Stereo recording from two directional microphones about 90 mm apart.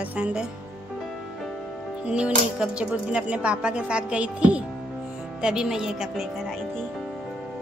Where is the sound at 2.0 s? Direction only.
10° right (ahead or behind).